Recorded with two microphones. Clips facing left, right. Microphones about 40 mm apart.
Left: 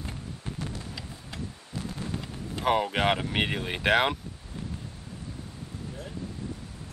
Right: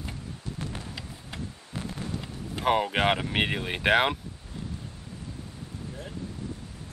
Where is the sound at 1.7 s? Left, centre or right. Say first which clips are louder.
Right 1 dB; right.